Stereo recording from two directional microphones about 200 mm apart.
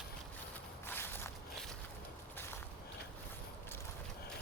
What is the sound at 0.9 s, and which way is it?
Walk, 10° left (ahead or behind).